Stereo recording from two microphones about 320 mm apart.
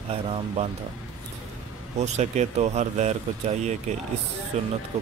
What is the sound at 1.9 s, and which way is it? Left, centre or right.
Speech, right.